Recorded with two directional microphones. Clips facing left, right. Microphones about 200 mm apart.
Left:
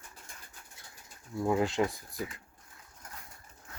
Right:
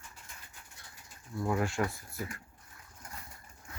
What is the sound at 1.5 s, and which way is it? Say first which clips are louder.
Speech: left 3 dB; 20° left (ahead or behind).